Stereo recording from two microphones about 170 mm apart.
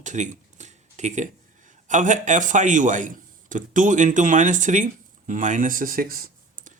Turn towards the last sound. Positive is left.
turn(degrees=-55)  # may be behind; listen again after turning